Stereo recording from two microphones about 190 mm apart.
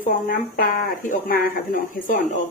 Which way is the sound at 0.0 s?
45° left (ahead or behind).